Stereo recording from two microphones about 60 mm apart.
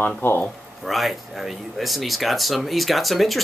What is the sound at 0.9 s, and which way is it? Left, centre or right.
Speech, centre.